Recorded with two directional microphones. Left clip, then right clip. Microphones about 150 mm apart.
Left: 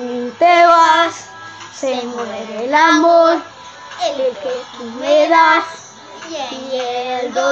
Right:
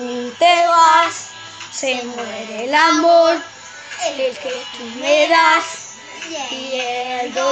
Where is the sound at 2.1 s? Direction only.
15° right (ahead or behind).